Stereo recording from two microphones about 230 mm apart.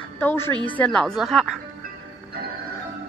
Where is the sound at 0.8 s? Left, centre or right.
Centre.